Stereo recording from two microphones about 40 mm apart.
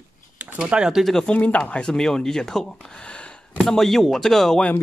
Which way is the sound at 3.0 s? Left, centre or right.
Left.